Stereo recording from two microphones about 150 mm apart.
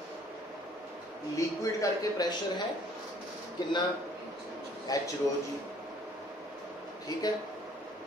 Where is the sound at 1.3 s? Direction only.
20° left (ahead or behind).